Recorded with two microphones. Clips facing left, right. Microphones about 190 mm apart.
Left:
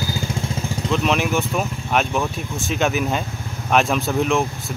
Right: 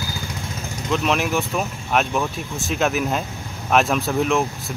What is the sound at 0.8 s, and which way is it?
Speech, centre (ahead or behind).